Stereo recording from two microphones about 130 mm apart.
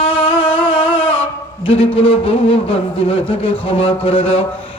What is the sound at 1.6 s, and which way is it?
Speech, 45° left (ahead or behind).